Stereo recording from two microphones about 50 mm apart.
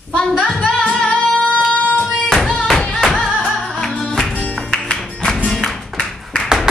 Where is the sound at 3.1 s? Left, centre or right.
Centre.